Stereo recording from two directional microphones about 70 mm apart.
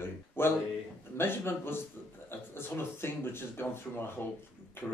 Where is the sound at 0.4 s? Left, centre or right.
Left.